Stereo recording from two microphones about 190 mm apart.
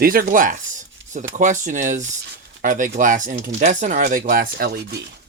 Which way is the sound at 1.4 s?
40° right (ahead or behind).